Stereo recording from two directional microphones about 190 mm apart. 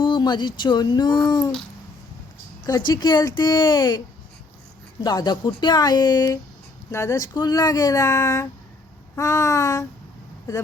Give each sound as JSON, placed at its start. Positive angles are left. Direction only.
{"t": 0.0, "sound": "speech", "side_deg": 25}
{"t": 2.6, "sound": "speech", "side_deg": 20}
{"t": 5.0, "sound": "speech", "side_deg": 20}